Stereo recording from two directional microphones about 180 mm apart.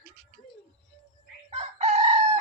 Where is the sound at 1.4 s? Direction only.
35° right (ahead or behind).